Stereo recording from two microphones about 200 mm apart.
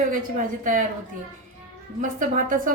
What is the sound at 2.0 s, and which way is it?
Speech, 40° right (ahead or behind).